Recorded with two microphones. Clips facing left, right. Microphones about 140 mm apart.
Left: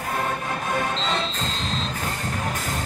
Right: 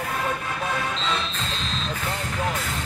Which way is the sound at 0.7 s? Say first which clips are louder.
Left 2 dB; 45° left (ahead or behind).